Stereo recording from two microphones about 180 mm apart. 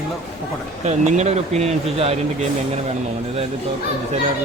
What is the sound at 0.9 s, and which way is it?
Speech, 40° right (ahead or behind).